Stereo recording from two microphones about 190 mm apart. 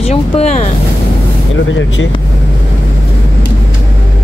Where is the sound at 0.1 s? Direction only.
35° left (ahead or behind).